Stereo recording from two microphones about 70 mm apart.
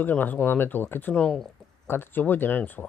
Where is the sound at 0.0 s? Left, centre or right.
Left.